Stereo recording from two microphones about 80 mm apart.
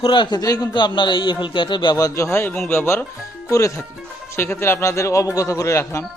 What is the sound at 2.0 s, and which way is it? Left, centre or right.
Speech, left.